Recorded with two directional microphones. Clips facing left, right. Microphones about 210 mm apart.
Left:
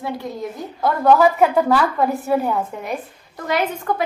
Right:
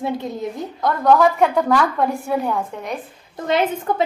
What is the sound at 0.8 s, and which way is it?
A woman's voice, 5° left (ahead or behind).